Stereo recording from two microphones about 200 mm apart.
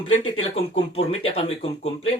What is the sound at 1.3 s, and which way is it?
Speech, 30° left (ahead or behind).